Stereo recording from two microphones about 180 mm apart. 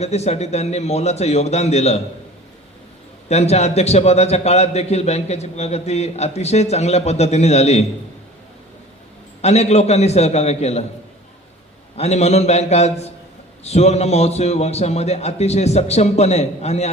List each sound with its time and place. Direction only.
0.0 s a man's voice: 35° left (ahead or behind)
3.2 s a man's voice: 35° left (ahead or behind)
9.4 s a man's voice: 35° left (ahead or behind)
11.9 s a man's voice: 35° left (ahead or behind)